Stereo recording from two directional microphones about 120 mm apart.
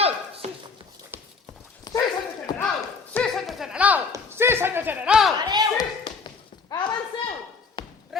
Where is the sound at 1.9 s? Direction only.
30° left (ahead or behind).